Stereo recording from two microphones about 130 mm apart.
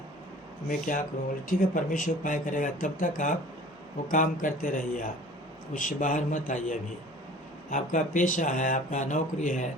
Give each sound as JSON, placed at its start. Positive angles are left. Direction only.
{"t": 0.7, "sound": "speech", "side_deg": 90}